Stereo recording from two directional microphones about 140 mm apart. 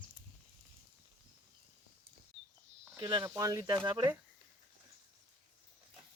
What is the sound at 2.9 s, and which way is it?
Speech, 30° right (ahead or behind).